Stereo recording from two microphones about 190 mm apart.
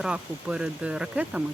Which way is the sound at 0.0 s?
5° right (ahead or behind).